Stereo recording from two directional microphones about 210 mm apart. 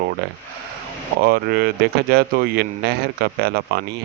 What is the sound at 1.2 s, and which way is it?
A man's voice, 45° right (ahead or behind).